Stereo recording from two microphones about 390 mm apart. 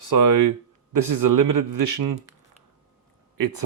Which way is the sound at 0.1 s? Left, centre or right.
Right.